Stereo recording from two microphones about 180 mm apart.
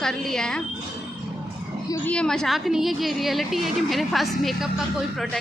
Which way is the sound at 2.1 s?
5° left (ahead or behind).